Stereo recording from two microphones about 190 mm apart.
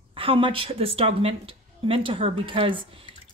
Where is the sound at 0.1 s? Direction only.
30° right (ahead or behind).